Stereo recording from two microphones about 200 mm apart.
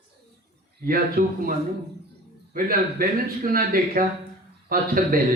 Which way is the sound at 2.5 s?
45° right (ahead or behind).